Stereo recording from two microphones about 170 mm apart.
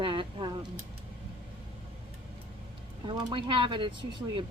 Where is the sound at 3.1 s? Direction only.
25° right (ahead or behind).